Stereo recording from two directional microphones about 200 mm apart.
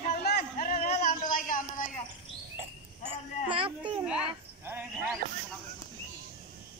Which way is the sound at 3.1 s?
25° right (ahead or behind).